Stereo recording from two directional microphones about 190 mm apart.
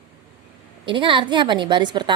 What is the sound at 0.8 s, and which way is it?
A woman's voice, 25° right (ahead or behind).